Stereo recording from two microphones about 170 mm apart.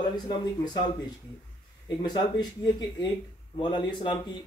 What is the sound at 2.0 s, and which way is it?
Speech, 25° left (ahead or behind).